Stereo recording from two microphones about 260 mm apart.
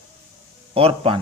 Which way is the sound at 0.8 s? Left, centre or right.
Right.